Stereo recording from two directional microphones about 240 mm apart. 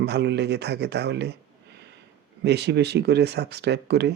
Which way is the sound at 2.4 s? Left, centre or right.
Right.